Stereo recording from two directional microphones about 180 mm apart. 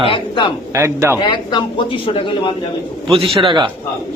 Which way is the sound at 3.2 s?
30° right (ahead or behind).